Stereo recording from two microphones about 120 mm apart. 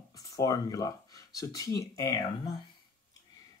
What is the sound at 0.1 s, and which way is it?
Speech, 30° left (ahead or behind).